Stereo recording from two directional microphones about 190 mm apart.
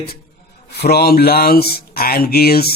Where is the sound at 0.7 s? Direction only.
55° left (ahead or behind).